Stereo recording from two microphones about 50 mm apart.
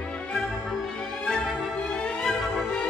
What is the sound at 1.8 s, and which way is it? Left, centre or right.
Music, centre.